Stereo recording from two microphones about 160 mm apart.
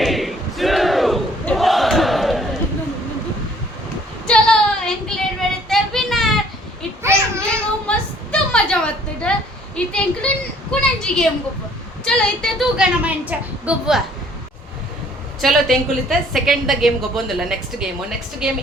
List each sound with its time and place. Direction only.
0.0 s battle cry: centre (ahead or behind)
4.3 s child singing: 5° left (ahead or behind)
7.0 s a sound: 15° right (ahead or behind)
7.5 s a sound: 5° left (ahead or behind)
15.4 s a woman's voice: centre (ahead or behind)
18.4 s a woman's voice: 5° right (ahead or behind)